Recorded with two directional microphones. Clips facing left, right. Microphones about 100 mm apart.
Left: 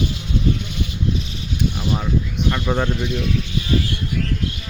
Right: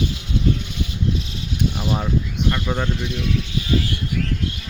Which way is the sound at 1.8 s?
15° right (ahead or behind).